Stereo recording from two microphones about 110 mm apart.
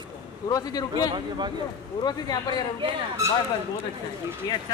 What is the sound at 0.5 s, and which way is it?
A man's voice, 35° left (ahead or behind).